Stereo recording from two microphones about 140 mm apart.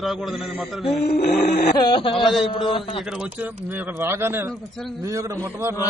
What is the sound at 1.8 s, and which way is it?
Speech, 35° left (ahead or behind).